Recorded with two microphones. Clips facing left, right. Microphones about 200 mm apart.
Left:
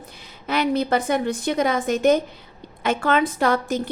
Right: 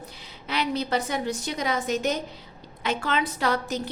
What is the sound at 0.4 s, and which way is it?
A woman's voice, 50° left (ahead or behind).